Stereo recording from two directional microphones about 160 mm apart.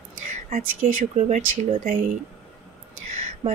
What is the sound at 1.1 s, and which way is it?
Speech, 45° right (ahead or behind).